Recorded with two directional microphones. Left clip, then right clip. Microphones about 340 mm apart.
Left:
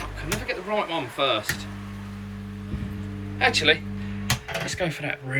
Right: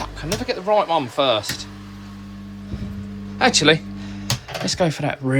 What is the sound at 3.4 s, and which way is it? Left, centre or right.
Speech, centre.